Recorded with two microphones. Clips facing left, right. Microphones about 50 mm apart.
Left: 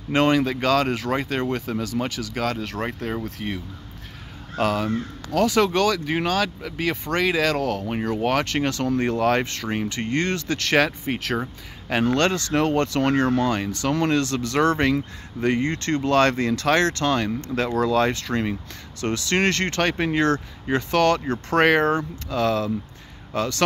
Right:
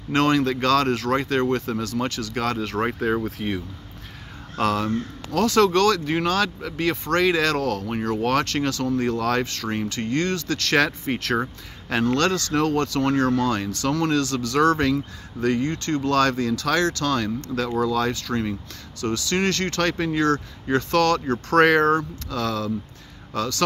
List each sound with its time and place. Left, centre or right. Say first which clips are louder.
0.1 s speech: even; centre
8.5 s speech: left 1 dB; left
10.8 s speech: even; centre
11.9 s speech: even; left
13.5 s speech: even; left
17.7 s speech: left 3 dB; left
20.6 s speech: even; centre